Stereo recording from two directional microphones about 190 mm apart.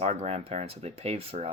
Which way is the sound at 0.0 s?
35° right (ahead or behind).